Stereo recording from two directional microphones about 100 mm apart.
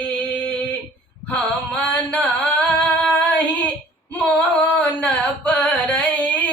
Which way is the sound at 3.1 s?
15° left (ahead or behind).